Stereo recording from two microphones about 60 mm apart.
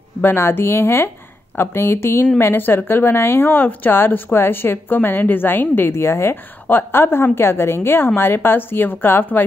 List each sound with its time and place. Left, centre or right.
0.2 s a woman's voice: left